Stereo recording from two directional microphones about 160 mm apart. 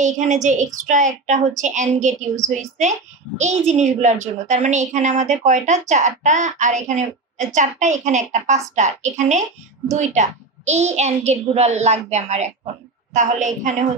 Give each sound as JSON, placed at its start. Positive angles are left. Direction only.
{"t": 0.0, "sound": "a woman's voice", "side_deg": -50}